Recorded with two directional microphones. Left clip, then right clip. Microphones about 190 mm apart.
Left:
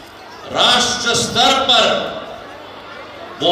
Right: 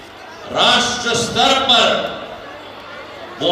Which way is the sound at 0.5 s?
45° left (ahead or behind).